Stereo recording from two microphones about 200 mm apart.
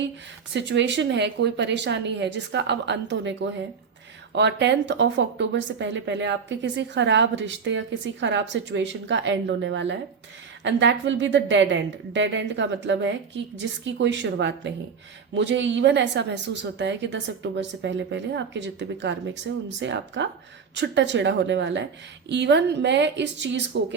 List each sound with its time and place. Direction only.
0.5 s a woman's voice: 60° right (ahead or behind)